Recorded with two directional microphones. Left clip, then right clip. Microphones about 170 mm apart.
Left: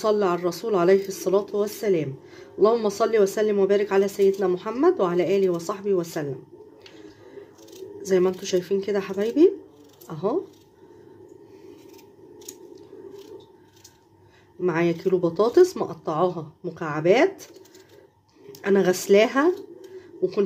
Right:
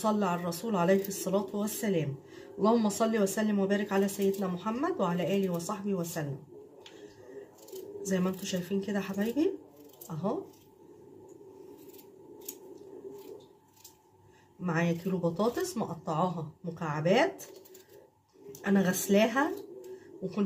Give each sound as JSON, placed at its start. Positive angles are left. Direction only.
{"t": 0.0, "sound": "speech", "side_deg": 50}
{"t": 8.0, "sound": "speech", "side_deg": 50}
{"t": 14.6, "sound": "speech", "side_deg": 50}
{"t": 18.5, "sound": "speech", "side_deg": 55}